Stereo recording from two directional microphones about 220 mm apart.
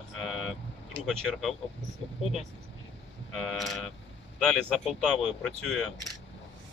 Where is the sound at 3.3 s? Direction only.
Centre (ahead or behind).